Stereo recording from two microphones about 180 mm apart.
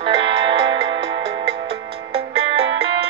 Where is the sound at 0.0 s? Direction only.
30° right (ahead or behind).